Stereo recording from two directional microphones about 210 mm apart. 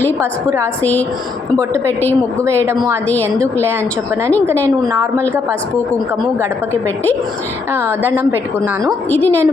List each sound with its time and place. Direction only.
0.2 s a woman's voice: 15° right (ahead or behind)
0.8 s a woman's voice: 10° left (ahead or behind)
2.6 s a woman's voice: 15° right (ahead or behind)
6.8 s a woman's voice: 10° left (ahead or behind)
7.7 s a woman's voice: 10° right (ahead or behind)
8.8 s a woman's voice: 5° left (ahead or behind)